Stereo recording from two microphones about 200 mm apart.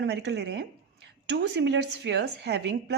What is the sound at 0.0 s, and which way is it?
A woman's voice, 60° right (ahead or behind).